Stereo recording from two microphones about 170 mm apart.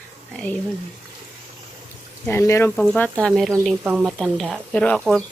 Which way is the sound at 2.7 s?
5° left (ahead or behind).